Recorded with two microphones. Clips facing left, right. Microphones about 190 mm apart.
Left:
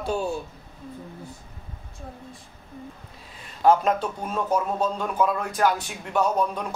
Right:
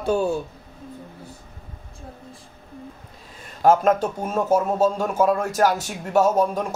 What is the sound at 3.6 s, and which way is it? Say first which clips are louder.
Speech: right 3 dB; 45° right (ahead or behind).